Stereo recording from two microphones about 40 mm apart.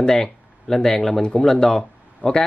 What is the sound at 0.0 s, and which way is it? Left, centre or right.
Speech, centre.